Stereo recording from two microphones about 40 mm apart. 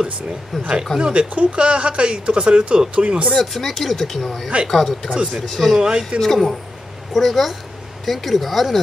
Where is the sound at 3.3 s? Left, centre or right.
Centre.